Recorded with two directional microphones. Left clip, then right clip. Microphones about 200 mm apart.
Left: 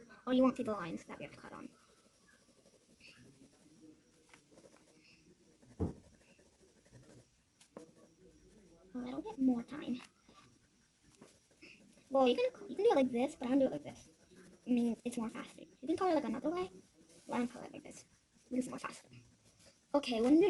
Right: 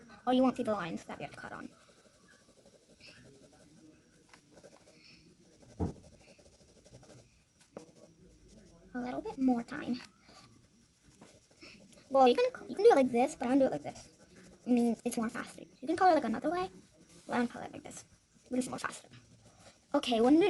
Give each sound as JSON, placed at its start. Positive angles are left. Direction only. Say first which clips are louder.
{"t": 0.3, "sound": "speech", "louder": "right 3 dB", "side_deg": -35}
{"t": 9.0, "sound": "speech", "louder": "right 3 dB", "side_deg": -35}
{"t": 12.1, "sound": "speech", "louder": "right 6 dB", "side_deg": -35}
{"t": 19.9, "sound": "speech", "louder": "right 4 dB", "side_deg": -40}